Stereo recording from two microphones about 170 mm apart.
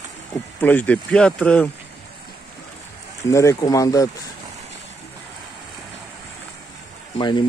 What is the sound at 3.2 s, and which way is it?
Speech, 15° left (ahead or behind).